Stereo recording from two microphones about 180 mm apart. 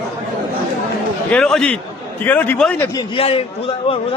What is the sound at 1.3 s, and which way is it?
A man's voice, 5° left (ahead or behind).